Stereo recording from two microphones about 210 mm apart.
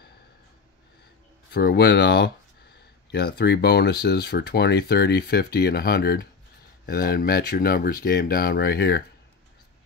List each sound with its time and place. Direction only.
1.5 s speech: 50° left (ahead or behind)